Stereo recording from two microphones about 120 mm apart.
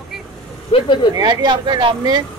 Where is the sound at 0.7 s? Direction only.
40° left (ahead or behind).